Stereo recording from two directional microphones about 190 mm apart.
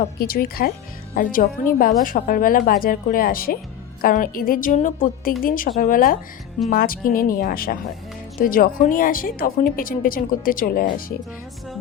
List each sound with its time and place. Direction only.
0.0 s speech: 50° left (ahead or behind)